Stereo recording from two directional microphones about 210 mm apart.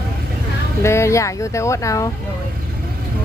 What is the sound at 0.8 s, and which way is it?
Speech, 15° left (ahead or behind).